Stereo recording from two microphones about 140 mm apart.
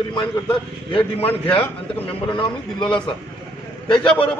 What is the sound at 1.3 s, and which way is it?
Speech, 10° left (ahead or behind).